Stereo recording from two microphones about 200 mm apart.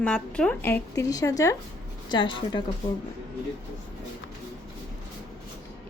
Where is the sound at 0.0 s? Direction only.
5° left (ahead or behind); by 2.6 s 20° left (ahead or behind).